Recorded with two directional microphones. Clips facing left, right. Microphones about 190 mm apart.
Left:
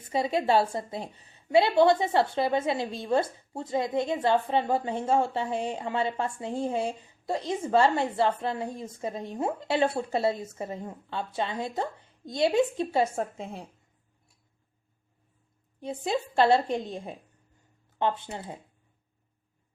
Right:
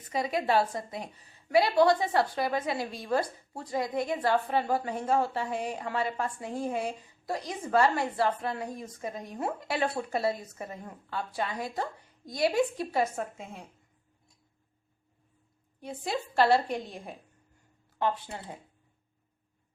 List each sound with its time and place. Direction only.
0.1 s a woman's voice: 25° left (ahead or behind)
15.8 s a woman's voice: 25° left (ahead or behind)